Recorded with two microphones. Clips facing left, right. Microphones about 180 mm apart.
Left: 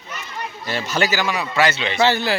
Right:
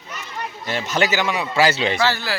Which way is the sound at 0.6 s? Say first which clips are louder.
Right 1 dB; 15° right (ahead or behind).